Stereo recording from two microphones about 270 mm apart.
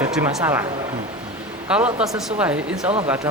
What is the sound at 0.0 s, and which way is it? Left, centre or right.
Speech, centre.